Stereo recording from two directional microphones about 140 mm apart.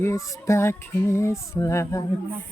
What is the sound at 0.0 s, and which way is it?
Female singing, 20° left (ahead or behind).